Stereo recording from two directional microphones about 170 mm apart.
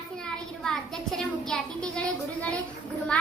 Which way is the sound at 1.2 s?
5° left (ahead or behind).